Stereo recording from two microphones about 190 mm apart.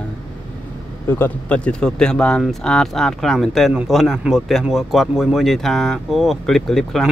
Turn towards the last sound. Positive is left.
turn(degrees=0)  # may be behind; listen again after turning